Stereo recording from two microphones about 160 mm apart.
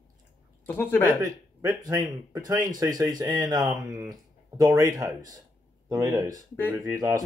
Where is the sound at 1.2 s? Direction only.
25° right (ahead or behind).